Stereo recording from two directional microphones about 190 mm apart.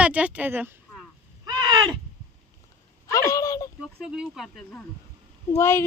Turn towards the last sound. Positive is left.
turn(degrees=15)  # may be behind; listen again after turning